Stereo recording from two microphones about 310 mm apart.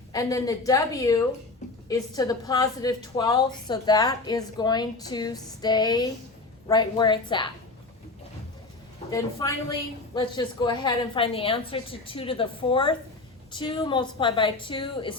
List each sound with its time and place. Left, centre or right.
0.1 s a woman's voice: centre
9.1 s a woman's voice: centre